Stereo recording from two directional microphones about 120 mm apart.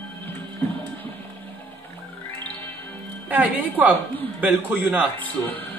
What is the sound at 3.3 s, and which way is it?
A woman's voice, 15° right (ahead or behind).